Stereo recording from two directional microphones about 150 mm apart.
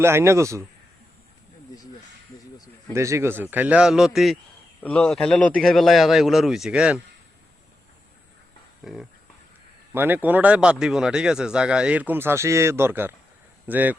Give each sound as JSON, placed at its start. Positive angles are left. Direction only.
{"t": 0.0, "sound": "speech", "side_deg": -15}
{"t": 2.9, "sound": "a man's voice", "side_deg": -20}
{"t": 8.8, "sound": "speech", "side_deg": 0}
{"t": 9.9, "sound": "speech", "side_deg": -15}